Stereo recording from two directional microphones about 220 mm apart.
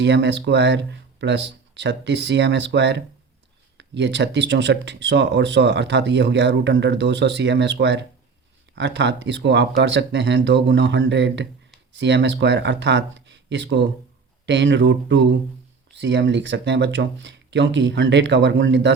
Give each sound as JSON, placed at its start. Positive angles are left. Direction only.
{"t": 0.0, "sound": "speech", "side_deg": -50}